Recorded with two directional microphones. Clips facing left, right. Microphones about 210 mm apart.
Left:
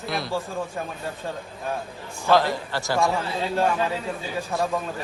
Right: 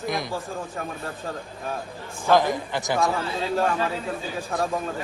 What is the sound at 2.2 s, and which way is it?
Speech, 15° right (ahead or behind).